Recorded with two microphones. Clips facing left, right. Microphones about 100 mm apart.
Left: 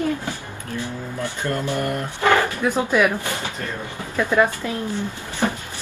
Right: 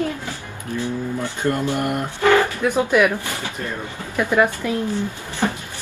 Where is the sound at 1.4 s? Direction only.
20° right (ahead or behind).